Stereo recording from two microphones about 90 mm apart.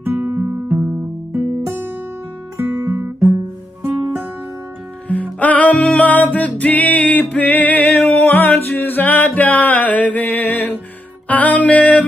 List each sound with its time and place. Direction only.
0.0 s music: 25° right (ahead or behind)
2.5 s guitar: 25° right (ahead or behind)
5.0 s music: 15° left (ahead or behind)